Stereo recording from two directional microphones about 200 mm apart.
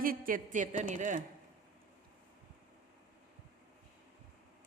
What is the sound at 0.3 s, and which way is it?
Speech, 40° right (ahead or behind).